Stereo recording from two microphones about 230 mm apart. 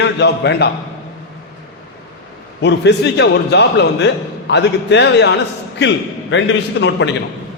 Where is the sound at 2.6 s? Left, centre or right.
Left.